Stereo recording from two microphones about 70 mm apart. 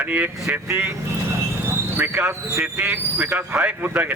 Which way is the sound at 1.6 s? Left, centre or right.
Right.